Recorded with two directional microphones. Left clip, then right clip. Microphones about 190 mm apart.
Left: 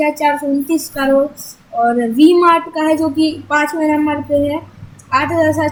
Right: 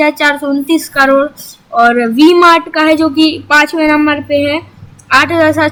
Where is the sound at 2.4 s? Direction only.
15° right (ahead or behind).